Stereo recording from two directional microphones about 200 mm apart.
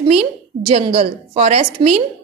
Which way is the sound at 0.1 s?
30° right (ahead or behind).